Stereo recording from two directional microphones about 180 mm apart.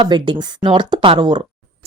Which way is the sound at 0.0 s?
25° right (ahead or behind).